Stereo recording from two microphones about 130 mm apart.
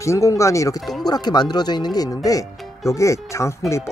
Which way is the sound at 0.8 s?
Centre (ahead or behind).